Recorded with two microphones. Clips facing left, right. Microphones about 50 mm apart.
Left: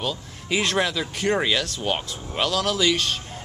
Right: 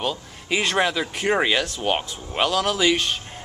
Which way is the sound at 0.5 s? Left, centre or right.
Centre.